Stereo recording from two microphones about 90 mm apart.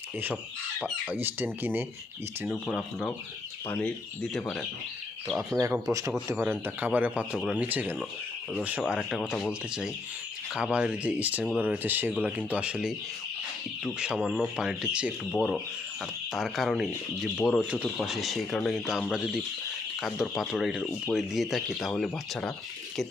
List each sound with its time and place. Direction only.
1.1 s speech: 20° right (ahead or behind)
2.5 s speech: centre (ahead or behind)
3.8 s speech: 10° left (ahead or behind)
5.5 s speech: 35° right (ahead or behind)
6.4 s speech: 25° right (ahead or behind)
9.0 s speech: centre (ahead or behind)
14.0 s speech: 5° right (ahead or behind)
16.3 s speech: centre (ahead or behind)